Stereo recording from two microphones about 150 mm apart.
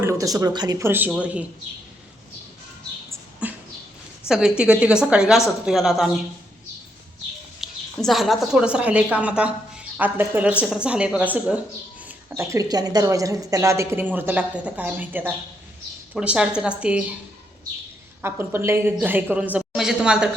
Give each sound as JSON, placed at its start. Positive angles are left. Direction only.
{"t": 0.0, "sound": "a woman's voice", "side_deg": -20}
{"t": 3.4, "sound": "a sound", "side_deg": -10}
{"t": 4.3, "sound": "a woman's voice", "side_deg": -5}
{"t": 7.6, "sound": "a woman's voice", "side_deg": 0}
{"t": 12.3, "sound": "a woman's voice", "side_deg": -20}
{"t": 18.2, "sound": "a woman's voice", "side_deg": -15}